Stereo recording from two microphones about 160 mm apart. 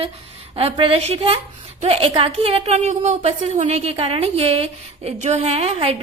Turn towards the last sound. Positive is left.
turn(degrees=-40)  # may be behind; listen again after turning